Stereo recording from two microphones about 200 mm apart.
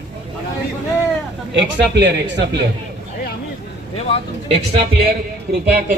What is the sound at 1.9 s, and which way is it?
Speech, 60° right (ahead or behind).